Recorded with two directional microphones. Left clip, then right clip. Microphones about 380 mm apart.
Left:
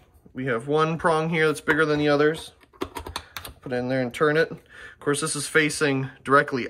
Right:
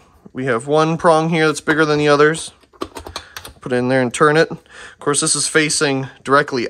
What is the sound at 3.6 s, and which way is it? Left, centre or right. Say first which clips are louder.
Speech: right 9 dB; centre.